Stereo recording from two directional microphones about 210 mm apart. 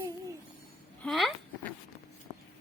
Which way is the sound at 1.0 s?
Centre (ahead or behind).